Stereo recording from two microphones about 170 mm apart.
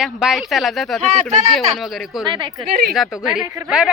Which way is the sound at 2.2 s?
25° right (ahead or behind).